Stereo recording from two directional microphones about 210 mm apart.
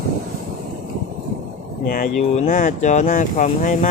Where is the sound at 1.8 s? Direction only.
40° left (ahead or behind).